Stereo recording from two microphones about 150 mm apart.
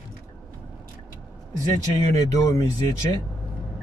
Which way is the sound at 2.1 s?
20° left (ahead or behind).